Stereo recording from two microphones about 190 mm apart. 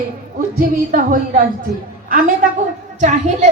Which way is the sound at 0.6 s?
45° right (ahead or behind).